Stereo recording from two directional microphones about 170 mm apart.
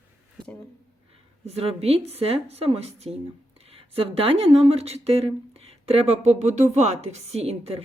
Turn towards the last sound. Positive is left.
turn(degrees=-35)  # may be behind; listen again after turning